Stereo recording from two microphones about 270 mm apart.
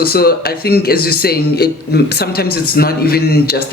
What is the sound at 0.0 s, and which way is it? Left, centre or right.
Speech, left.